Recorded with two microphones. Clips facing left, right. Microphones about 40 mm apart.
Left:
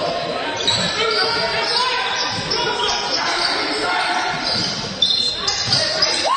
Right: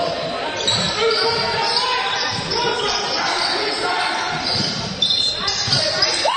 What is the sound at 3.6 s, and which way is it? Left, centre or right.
Basketball bounce, centre.